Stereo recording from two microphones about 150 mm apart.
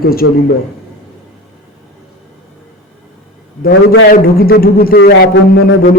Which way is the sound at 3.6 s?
85° left.